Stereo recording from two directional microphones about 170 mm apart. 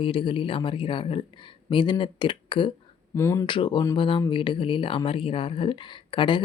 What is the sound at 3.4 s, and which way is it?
Speech, 30° left (ahead or behind).